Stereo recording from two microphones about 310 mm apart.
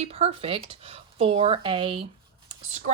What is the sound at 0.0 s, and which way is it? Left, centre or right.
A woman's voice, centre.